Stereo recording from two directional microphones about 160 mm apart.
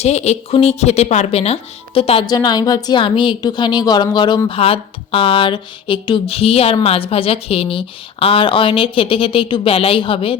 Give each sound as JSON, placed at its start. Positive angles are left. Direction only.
{"t": 0.0, "sound": "a woman's voice", "side_deg": 40}